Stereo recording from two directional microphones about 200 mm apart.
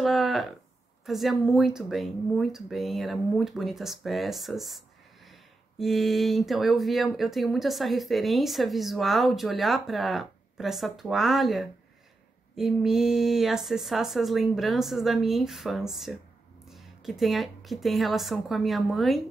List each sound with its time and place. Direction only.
0.0 s a woman's voice: centre (ahead or behind)